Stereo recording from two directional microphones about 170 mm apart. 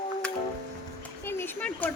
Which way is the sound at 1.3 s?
10° left (ahead or behind).